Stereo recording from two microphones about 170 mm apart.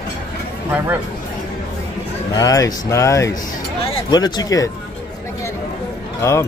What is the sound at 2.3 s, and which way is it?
Speech, 20° left (ahead or behind).